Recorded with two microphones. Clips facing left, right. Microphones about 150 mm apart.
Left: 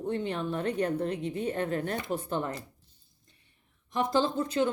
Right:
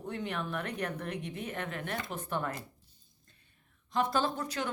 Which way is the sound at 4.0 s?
20° left (ahead or behind).